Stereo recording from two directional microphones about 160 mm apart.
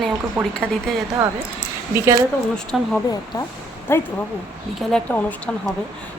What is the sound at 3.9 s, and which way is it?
Speech, 15° left (ahead or behind).